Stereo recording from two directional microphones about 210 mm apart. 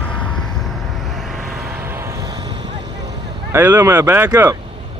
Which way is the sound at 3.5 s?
10° right (ahead or behind).